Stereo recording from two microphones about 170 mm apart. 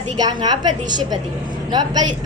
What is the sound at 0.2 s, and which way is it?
A woman's voice, 25° right (ahead or behind).